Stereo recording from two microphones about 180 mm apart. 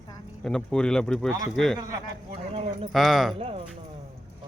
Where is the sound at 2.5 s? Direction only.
35° right (ahead or behind).